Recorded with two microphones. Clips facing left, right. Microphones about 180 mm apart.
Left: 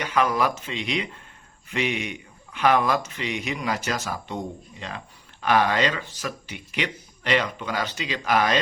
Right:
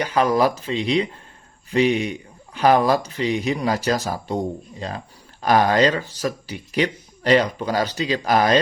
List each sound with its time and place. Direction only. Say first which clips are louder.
0.0 s speech: right 5 dB; 35° right (ahead or behind)